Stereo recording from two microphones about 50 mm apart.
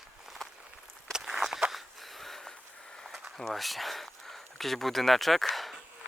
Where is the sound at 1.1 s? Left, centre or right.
Centre.